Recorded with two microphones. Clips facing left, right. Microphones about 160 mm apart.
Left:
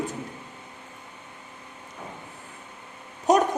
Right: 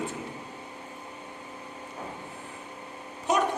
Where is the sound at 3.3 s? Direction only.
40° left (ahead or behind).